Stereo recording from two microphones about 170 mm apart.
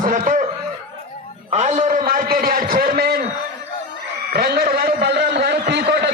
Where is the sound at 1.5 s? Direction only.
40° right (ahead or behind); by 3.2 s 60° right (ahead or behind).